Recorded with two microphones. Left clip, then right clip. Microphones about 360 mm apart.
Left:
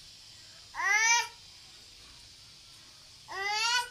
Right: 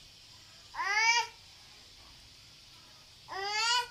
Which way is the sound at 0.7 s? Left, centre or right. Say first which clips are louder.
Left 2 dB; centre.